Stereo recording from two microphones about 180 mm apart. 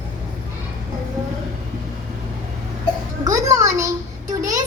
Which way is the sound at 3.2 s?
20° right (ahead or behind).